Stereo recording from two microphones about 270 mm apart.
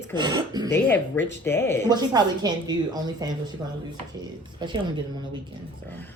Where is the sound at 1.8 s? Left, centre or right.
Centre.